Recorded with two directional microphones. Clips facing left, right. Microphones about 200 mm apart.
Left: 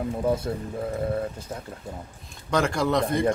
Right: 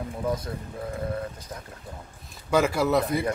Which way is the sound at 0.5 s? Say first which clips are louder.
Left 5 dB; 25° left (ahead or behind).